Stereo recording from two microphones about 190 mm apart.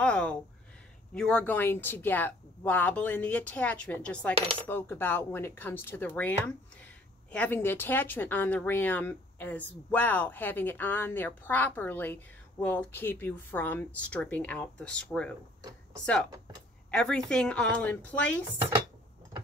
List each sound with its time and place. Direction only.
0.0 s a sound: 5° left (ahead or behind)
1.1 s speech: 5° left (ahead or behind)
16.9 s speech: 5° left (ahead or behind)
18.6 s speech: 20° right (ahead or behind)